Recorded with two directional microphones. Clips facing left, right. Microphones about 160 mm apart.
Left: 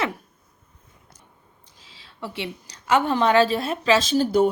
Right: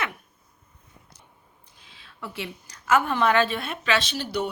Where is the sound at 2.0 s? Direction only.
25° left (ahead or behind).